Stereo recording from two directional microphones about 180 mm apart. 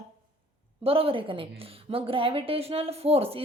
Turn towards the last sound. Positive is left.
turn(degrees=-35)  # may be behind; listen again after turning